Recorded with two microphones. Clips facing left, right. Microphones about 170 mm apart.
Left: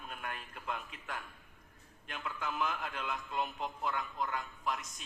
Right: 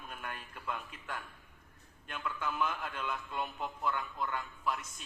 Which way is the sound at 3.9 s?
40° left (ahead or behind).